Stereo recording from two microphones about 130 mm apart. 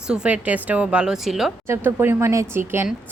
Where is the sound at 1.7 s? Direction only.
15° right (ahead or behind).